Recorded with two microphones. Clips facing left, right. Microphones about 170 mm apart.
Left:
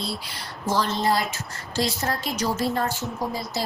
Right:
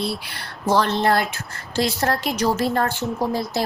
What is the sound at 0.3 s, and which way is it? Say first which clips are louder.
A woman's voice: right 5 dB; 65° right (ahead or behind).